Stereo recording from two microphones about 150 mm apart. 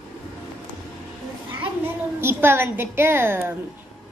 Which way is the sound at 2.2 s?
15° right (ahead or behind).